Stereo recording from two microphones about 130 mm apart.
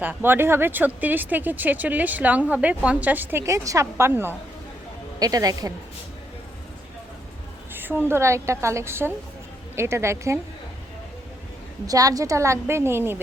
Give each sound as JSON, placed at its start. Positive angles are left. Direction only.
{"t": 0.0, "sound": "speech", "side_deg": -15}
{"t": 5.2, "sound": "a woman's voice", "side_deg": -30}
{"t": 7.7, "sound": "a woman's voice", "side_deg": -15}
{"t": 11.9, "sound": "a woman's voice", "side_deg": -25}